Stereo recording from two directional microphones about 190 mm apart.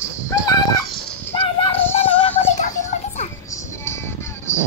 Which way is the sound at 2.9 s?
35° left (ahead or behind).